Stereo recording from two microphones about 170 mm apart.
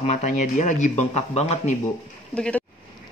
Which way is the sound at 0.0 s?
40° left (ahead or behind).